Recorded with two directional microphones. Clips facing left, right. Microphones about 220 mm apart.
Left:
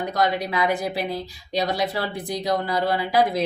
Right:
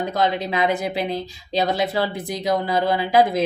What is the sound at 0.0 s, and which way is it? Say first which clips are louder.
A woman's voice: right 1 dB; 25° right (ahead or behind).